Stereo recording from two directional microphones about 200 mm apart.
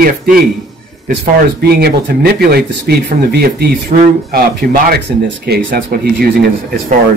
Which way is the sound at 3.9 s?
35° right (ahead or behind).